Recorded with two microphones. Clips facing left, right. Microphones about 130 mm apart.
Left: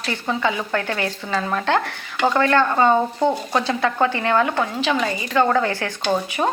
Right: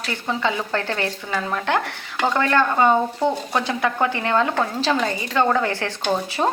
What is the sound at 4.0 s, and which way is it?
Speech, 20° right (ahead or behind).